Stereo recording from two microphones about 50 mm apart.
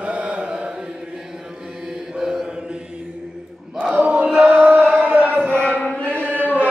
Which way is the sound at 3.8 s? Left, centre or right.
Right.